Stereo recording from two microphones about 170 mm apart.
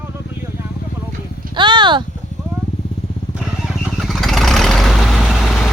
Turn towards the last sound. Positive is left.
turn(degrees=0)  # may be behind; listen again after turning